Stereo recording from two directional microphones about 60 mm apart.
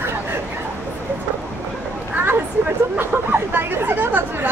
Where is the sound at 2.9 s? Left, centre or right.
Right.